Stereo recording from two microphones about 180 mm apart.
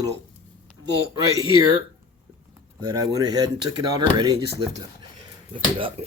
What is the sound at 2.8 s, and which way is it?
Speech, 20° right (ahead or behind).